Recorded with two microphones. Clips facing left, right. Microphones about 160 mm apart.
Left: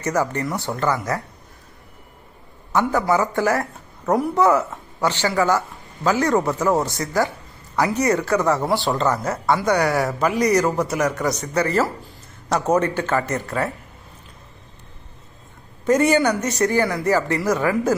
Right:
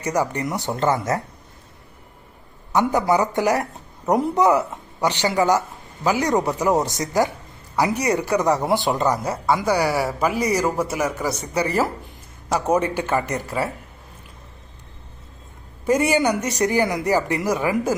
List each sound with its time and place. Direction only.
0.0 s speech: 10° right (ahead or behind)
2.7 s speech: 15° right (ahead or behind)
15.9 s speech: 10° right (ahead or behind)